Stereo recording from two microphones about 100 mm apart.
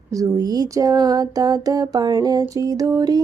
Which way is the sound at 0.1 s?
35° right (ahead or behind).